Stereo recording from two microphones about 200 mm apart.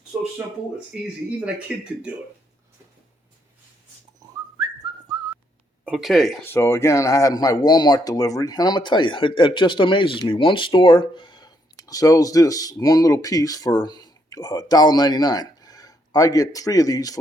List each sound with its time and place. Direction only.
0.9 s speech: 5° right (ahead or behind)
4.2 s whistling: 20° right (ahead or behind)
5.8 s speech: 5° right (ahead or behind)
6.4 s speech: 10° left (ahead or behind)